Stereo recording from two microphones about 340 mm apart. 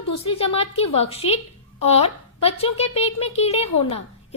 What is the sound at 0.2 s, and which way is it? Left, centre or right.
A woman's voice, centre.